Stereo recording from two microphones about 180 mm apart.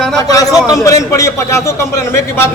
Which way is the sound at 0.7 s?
20° left (ahead or behind).